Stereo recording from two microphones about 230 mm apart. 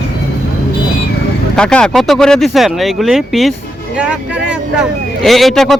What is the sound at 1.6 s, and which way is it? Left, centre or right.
Speech, centre.